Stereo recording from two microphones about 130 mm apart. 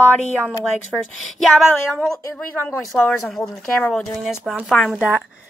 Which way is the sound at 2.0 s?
5° left (ahead or behind).